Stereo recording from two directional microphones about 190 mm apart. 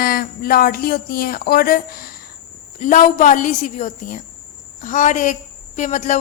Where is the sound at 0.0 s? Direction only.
50° left (ahead or behind).